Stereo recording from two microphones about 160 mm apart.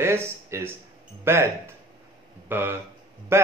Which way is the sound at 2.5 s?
15° right (ahead or behind).